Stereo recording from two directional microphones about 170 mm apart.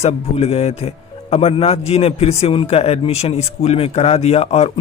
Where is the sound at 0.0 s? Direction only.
35° left (ahead or behind).